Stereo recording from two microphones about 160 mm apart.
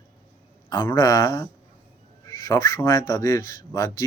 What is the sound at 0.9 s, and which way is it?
Speech, 20° left (ahead or behind).